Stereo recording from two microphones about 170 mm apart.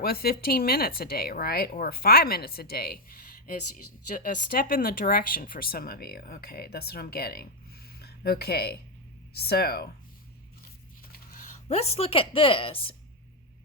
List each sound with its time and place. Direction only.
0.0 s speech: 65° left (ahead or behind)
11.7 s a woman's voice: 35° left (ahead or behind)